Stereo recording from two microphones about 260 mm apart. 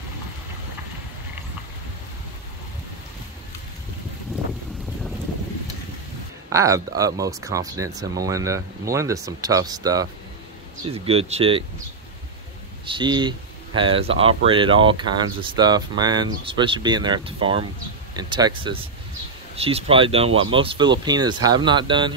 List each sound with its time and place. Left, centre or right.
6.5 s speech: centre
12.8 s speech: centre